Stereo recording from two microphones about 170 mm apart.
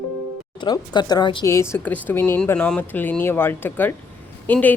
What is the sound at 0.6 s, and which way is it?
Speech, 25° left (ahead or behind).